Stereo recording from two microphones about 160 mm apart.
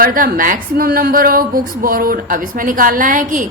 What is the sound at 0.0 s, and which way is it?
A woman's voice, 60° right (ahead or behind).